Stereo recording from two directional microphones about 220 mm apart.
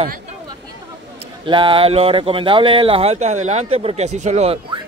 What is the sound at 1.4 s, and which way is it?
A man's voice, 20° right (ahead or behind).